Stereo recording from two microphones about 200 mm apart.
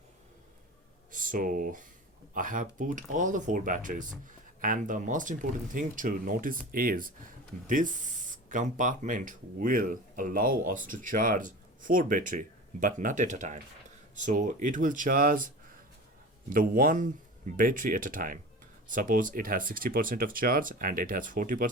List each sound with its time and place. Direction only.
1.1 s speech: 40° right (ahead or behind)